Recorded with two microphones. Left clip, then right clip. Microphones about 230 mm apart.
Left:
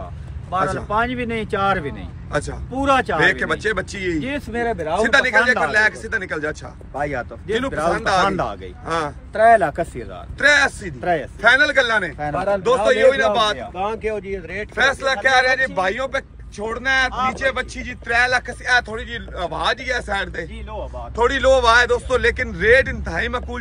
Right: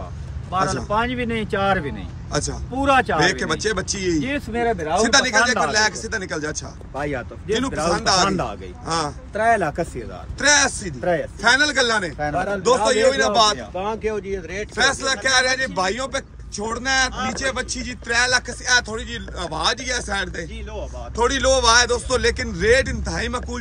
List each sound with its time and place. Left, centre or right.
0.7 s speech: centre
4.2 s speech: centre
7.0 s speech: centre
7.9 s speech: centre
9.3 s speech: centre
10.4 s speech: centre
11.0 s speech: left
11.4 s speech: centre
12.4 s speech: left
12.6 s speech: centre
13.6 s speech: left
14.8 s speech: centre